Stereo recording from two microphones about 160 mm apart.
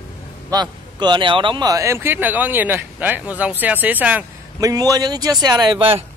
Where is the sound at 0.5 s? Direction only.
30° right (ahead or behind); by 4.2 s 10° right (ahead or behind).